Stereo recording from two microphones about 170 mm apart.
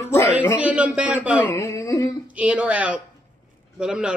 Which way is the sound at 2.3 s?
5° right (ahead or behind).